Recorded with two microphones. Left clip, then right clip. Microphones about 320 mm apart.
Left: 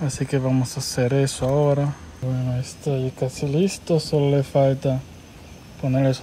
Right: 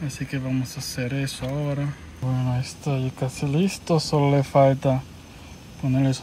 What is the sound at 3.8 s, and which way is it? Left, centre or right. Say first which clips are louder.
Speech: right 2 dB; right.